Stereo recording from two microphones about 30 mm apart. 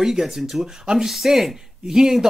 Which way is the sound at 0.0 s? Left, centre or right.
Centre.